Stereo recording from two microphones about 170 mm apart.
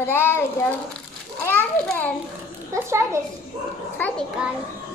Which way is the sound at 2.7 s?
15° right (ahead or behind).